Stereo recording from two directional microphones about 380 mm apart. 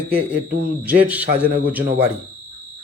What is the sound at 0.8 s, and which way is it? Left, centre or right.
Speech, centre.